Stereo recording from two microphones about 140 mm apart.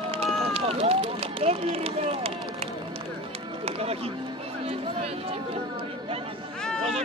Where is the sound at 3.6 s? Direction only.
45° right (ahead or behind).